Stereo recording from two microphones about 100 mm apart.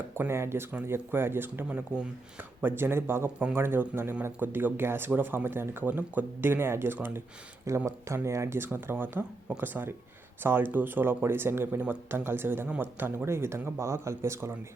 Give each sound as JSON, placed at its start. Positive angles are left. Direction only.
{"t": 0.2, "sound": "speech", "side_deg": -25}